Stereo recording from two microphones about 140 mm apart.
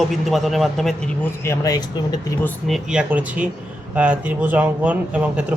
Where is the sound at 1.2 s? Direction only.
20° left (ahead or behind).